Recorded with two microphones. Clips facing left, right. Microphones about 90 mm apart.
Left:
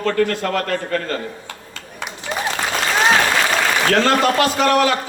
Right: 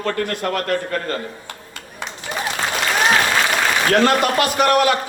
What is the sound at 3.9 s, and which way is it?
A man's voice, 15° right (ahead or behind).